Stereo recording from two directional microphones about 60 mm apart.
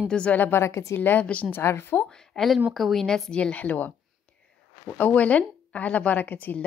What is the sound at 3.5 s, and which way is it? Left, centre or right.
A woman's voice, left.